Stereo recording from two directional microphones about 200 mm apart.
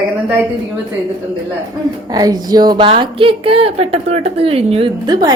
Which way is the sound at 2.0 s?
20° right (ahead or behind).